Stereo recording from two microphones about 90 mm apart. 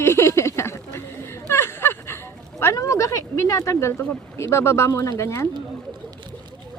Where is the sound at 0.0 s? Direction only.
30° left (ahead or behind).